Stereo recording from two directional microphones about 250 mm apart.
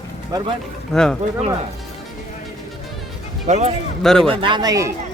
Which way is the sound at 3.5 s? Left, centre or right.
Right.